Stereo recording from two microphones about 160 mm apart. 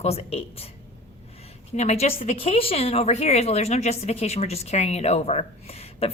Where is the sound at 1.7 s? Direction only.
45° left (ahead or behind).